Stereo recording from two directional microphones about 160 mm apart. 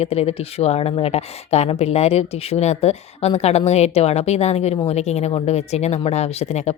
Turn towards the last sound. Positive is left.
turn(degrees=45)  # may be behind; listen again after turning